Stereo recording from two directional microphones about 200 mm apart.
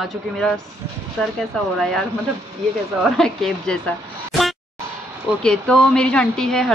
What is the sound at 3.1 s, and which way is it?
Speech, centre (ahead or behind).